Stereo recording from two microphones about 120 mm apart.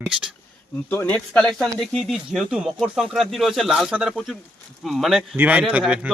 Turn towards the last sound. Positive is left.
turn(degrees=-10)  # may be behind; listen again after turning